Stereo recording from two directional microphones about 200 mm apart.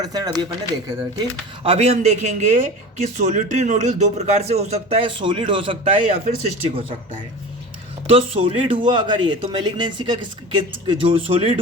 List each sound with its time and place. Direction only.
0.0 s speech: 20° right (ahead or behind)
1.6 s speech: 30° right (ahead or behind)
8.0 s speech: 30° right (ahead or behind)